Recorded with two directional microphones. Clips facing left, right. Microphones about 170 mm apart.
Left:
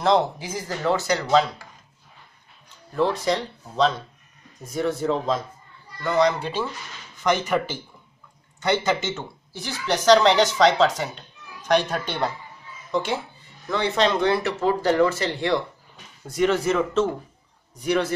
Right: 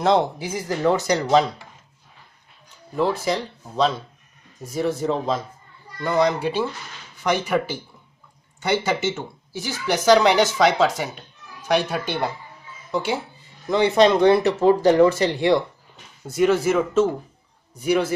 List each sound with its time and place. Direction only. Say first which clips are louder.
0.7 s speech: right 3 dB; 15° right (ahead or behind)
2.9 s speech: even; 5° right (ahead or behind)
6.0 s speech: right 1 dB; 10° right (ahead or behind)
16.3 s speech: right 3 dB; 5° right (ahead or behind)